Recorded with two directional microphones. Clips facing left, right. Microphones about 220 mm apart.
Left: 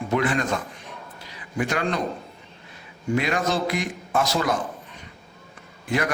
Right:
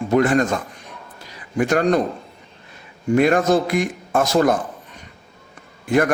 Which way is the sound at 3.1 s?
50° right (ahead or behind).